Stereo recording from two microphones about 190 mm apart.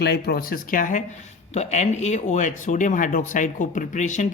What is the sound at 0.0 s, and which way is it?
Speech, 55° left (ahead or behind).